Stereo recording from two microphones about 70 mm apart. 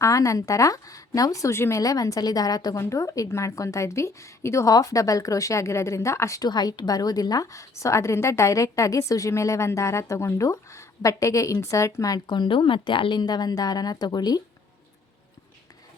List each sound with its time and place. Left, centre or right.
0.0 s a woman's voice: left
1.8 s a woman's voice: left
2.7 s a woman's voice: left
4.7 s a woman's voice: left
6.4 s a woman's voice: left